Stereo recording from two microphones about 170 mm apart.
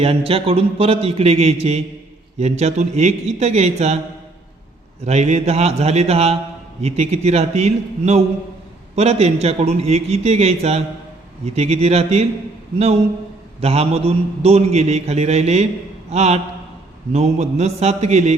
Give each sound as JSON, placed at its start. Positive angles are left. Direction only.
{"t": 0.0, "sound": "a man's voice", "side_deg": -35}
{"t": 5.0, "sound": "a man's voice", "side_deg": -40}
{"t": 13.6, "sound": "a man's voice", "side_deg": -35}